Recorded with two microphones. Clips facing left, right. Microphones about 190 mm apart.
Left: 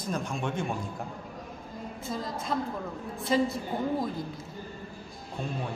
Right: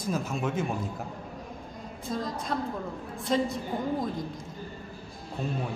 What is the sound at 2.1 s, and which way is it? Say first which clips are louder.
Speech: right 2 dB; centre (ahead or behind).